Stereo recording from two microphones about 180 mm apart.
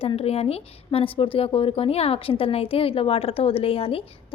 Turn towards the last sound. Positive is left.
turn(degrees=30)  # may be behind; listen again after turning